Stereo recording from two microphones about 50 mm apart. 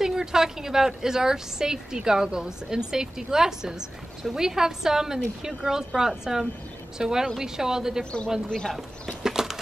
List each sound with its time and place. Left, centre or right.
0.0 s a woman's voice: centre
8.0 s a man's voice: left
9.2 s horse: centre